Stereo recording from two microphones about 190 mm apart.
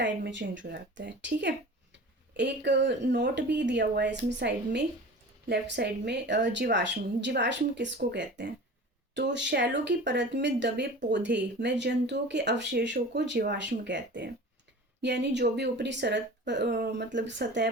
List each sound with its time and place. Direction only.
0.3 s speech: 75° right (ahead or behind)